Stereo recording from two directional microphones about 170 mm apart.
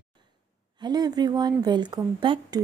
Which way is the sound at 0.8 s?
25° right (ahead or behind).